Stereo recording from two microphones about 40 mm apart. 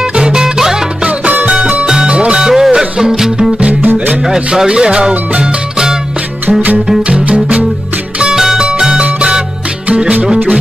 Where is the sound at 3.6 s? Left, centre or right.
Right.